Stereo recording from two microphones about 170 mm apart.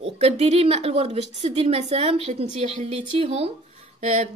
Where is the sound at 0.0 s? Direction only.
40° right (ahead or behind).